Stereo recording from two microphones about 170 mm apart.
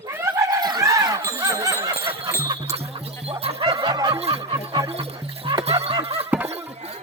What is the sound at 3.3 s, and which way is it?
Snicker, 35° right (ahead or behind).